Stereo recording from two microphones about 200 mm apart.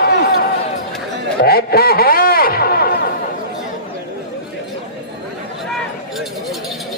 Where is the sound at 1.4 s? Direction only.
50° left (ahead or behind).